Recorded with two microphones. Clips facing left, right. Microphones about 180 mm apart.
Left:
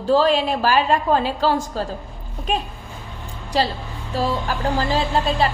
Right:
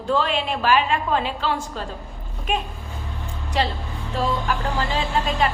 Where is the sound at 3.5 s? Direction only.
35° left (ahead or behind).